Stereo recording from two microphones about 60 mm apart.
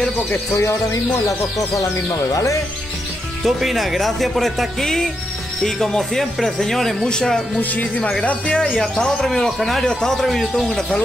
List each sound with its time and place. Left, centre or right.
0.3 s music: left
3.4 s speech: centre
7.7 s speech: left; by 10.5 s centre
10.5 s speech: centre